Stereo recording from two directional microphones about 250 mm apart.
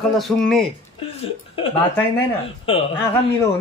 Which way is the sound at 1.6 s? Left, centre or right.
Left.